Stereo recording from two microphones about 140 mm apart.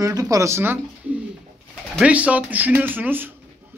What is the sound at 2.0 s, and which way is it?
A man's voice, 10° right (ahead or behind).